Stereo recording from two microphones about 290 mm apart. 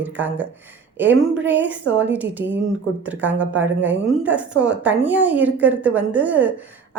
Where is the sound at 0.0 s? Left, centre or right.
Centre.